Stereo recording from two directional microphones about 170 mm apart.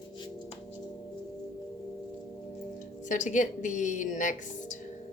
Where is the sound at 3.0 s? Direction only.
45° left (ahead or behind).